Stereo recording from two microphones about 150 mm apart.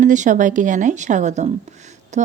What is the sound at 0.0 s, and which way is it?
A woman's voice, 55° right (ahead or behind).